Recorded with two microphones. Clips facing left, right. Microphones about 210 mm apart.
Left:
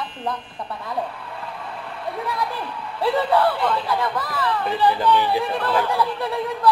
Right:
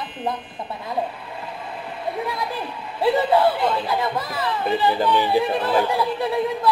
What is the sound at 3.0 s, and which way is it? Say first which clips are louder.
Speech: right 2 dB; 20° right (ahead or behind).